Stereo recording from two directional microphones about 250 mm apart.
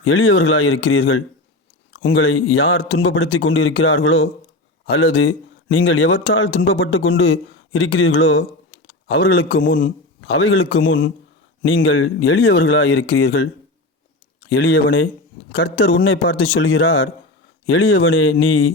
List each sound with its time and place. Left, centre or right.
0.0 s speech: left
9.0 s a man's voice: left
10.2 s speech: left
14.5 s speech: left